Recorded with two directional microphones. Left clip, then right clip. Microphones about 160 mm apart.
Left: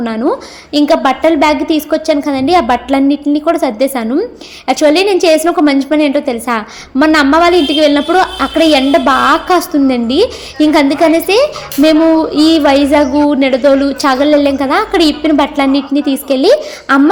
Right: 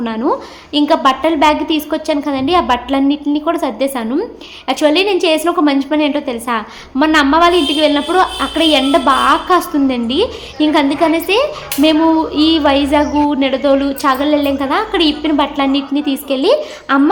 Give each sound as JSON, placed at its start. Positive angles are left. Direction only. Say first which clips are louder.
{"t": 0.0, "sound": "a woman's voice", "louder": "left 2 dB", "side_deg": 20}